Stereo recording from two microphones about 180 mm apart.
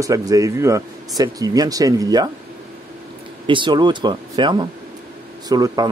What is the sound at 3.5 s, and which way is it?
A man's voice, 25° right (ahead or behind).